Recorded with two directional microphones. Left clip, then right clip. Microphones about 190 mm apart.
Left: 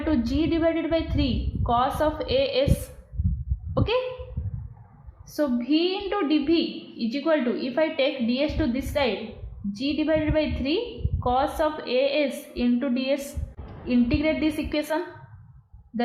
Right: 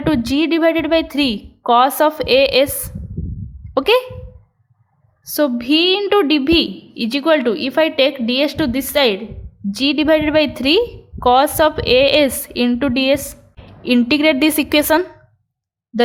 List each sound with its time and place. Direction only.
0.0 s a woman's voice: 50° right (ahead or behind)
3.8 s a woman's voice: 50° right (ahead or behind)
5.2 s a woman's voice: 55° right (ahead or behind)